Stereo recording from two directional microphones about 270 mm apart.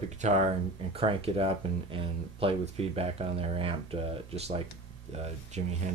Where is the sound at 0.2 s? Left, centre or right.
Right.